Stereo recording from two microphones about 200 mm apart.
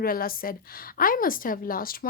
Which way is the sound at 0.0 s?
45° left (ahead or behind).